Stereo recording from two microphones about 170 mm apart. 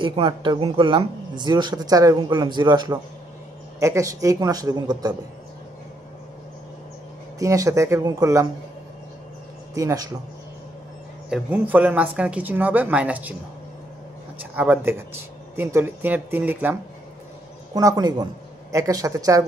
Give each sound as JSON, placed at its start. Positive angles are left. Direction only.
{"t": 0.0, "sound": "speech", "side_deg": -30}
{"t": 7.3, "sound": "speech", "side_deg": -20}
{"t": 9.8, "sound": "speech", "side_deg": -20}
{"t": 11.2, "sound": "speech", "side_deg": -5}
{"t": 14.4, "sound": "speech", "side_deg": -10}
{"t": 17.7, "sound": "speech", "side_deg": -20}